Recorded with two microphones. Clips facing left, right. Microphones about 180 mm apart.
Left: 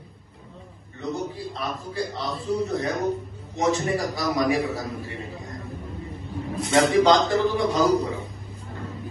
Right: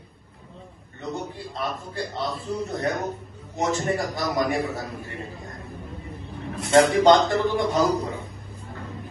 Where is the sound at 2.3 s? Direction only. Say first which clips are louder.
Left 4 dB; 35° left (ahead or behind).